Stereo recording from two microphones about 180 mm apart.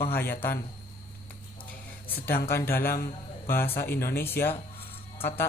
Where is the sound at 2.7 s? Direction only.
55° left (ahead or behind).